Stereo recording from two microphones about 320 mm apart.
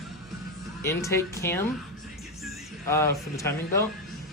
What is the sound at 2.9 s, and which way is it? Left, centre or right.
Speech, centre.